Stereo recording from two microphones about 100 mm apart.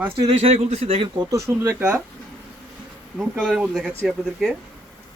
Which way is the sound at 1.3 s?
30° right (ahead or behind).